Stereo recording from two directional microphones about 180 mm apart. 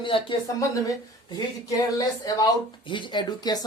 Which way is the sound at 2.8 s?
25° left (ahead or behind).